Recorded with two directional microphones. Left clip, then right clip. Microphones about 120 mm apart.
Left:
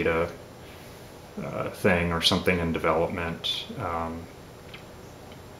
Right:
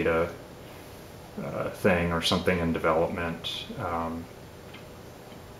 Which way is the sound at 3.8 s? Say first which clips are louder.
Even; 25° left (ahead or behind).